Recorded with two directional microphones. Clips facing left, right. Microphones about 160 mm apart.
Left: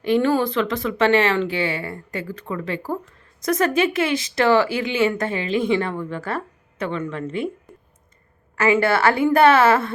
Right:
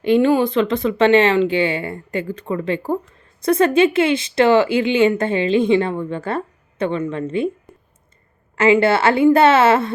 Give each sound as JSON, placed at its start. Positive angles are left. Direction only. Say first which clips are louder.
{"t": 0.0, "sound": "speech", "louder": "right 4 dB", "side_deg": -20}
{"t": 8.5, "sound": "speech", "louder": "right 4 dB", "side_deg": -20}